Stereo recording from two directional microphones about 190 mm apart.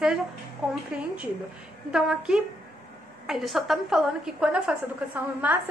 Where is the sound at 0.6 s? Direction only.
5° right (ahead or behind).